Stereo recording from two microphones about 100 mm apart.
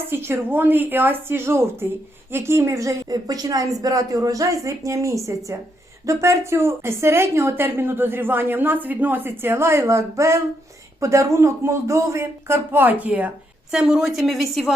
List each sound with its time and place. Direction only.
0.1 s a woman's voice: 25° right (ahead or behind); by 14.7 s centre (ahead or behind)